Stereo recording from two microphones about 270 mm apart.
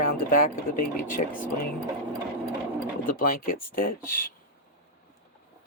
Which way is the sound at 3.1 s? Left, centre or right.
Left.